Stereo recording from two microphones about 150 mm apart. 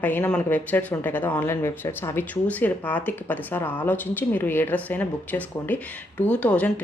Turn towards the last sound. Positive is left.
turn(degrees=10)  # may be behind; listen again after turning